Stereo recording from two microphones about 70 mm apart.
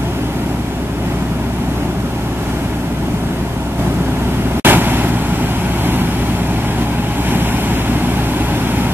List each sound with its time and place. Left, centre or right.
4.6 s vehicle: right